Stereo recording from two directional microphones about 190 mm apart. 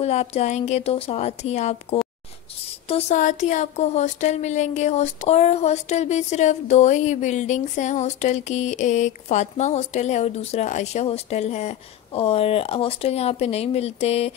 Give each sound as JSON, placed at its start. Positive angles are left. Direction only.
{"t": 0.0, "sound": "speech", "side_deg": 35}